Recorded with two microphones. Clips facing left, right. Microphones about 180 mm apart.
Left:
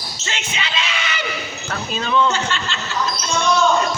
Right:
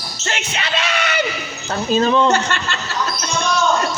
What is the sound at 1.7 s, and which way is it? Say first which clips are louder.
Speech: right 6 dB; 35° right (ahead or behind).